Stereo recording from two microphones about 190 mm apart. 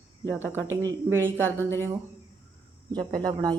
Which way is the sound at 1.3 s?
10° left (ahead or behind).